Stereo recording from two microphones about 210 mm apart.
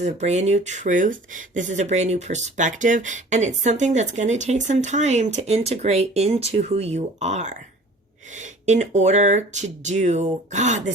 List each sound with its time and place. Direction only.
0.0 s speech: 35° right (ahead or behind)